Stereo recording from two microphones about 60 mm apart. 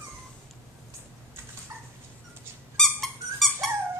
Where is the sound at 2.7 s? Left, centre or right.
Centre.